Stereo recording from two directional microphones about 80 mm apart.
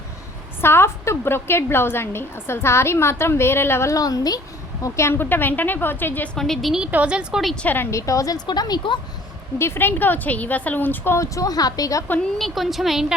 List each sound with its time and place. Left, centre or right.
0.6 s a woman's voice: left
3.9 s a woman's voice: left
4.8 s speech: left
6.3 s a woman's voice: centre
6.8 s a woman's voice: centre
7.5 s speech: centre
7.9 s a woman's voice: left
8.4 s speech: left
9.6 s speech: left
11.2 s a woman's voice: left
12.4 s a woman's voice: centre